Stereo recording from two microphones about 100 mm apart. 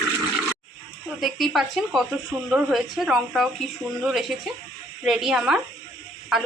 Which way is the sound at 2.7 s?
Centre (ahead or behind).